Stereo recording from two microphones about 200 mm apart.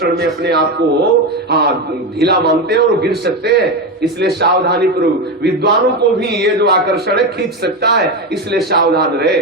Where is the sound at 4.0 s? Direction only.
55° right (ahead or behind).